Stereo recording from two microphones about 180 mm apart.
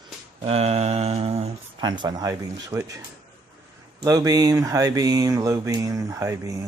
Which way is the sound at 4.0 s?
20° right (ahead or behind).